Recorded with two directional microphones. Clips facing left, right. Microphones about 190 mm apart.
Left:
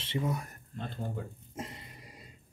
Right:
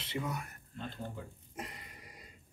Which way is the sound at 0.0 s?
25° left (ahead or behind).